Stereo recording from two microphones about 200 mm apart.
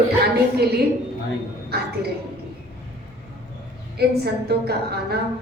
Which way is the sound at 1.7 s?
55° right (ahead or behind).